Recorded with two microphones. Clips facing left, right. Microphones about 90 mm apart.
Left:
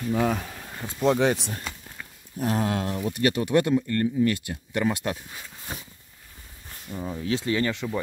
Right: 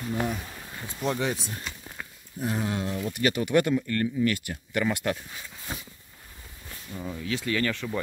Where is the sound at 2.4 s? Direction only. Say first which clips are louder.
Left 4 dB; 85° left.